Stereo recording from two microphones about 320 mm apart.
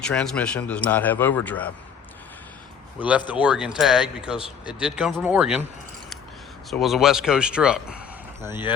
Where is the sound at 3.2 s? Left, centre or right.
Centre.